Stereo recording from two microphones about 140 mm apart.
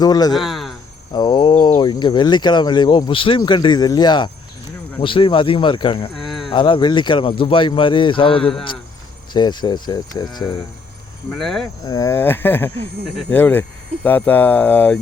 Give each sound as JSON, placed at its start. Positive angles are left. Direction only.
{"t": 0.0, "sound": "speech", "side_deg": 30}
{"t": 0.3, "sound": "speech", "side_deg": 0}
{"t": 1.1, "sound": "speech", "side_deg": 30}
{"t": 6.1, "sound": "a sound", "side_deg": 0}
{"t": 6.5, "sound": "speech", "side_deg": 35}
{"t": 11.3, "sound": "speech", "side_deg": 0}
{"t": 11.9, "sound": "speech", "side_deg": 25}